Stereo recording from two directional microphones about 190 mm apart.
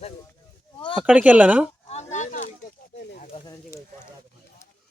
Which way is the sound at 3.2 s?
30° left (ahead or behind).